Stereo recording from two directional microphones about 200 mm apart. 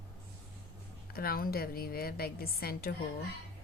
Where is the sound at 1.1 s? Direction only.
50° left (ahead or behind).